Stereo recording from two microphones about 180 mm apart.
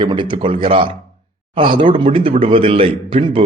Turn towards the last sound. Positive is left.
turn(degrees=-30)  # may be behind; listen again after turning